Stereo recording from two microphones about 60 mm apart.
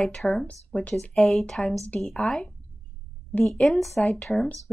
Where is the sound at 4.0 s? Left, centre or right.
Left.